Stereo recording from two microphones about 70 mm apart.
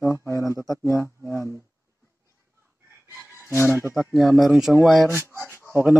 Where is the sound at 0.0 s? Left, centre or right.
Left.